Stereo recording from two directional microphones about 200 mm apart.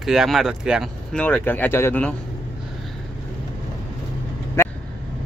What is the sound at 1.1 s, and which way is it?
Speech, 5° left (ahead or behind).